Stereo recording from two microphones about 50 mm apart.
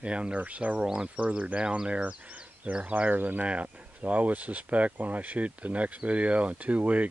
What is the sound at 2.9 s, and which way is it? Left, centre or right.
Speech, right.